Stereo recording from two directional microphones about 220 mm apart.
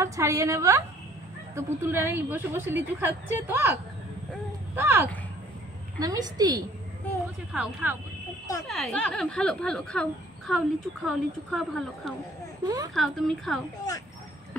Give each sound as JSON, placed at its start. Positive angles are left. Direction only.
{"t": 0.0, "sound": "a woman's voice", "side_deg": -15}
{"t": 4.7, "sound": "a woman's voice", "side_deg": -10}
{"t": 7.5, "sound": "a woman's voice", "side_deg": -5}
{"t": 12.6, "sound": "a woman's voice", "side_deg": -15}
{"t": 12.9, "sound": "speech", "side_deg": 0}